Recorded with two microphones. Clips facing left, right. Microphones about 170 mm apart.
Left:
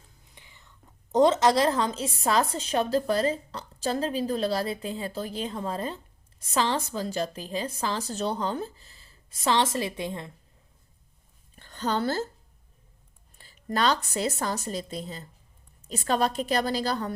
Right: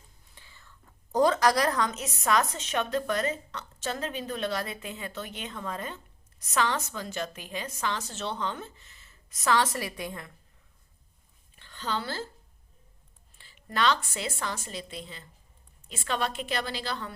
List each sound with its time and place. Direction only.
0.3 s speech: 20° left (ahead or behind)
11.5 s a woman's voice: 45° left (ahead or behind)
13.4 s speech: 40° left (ahead or behind)